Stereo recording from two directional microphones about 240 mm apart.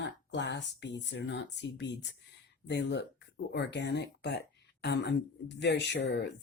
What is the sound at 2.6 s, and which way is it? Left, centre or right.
Speech, left.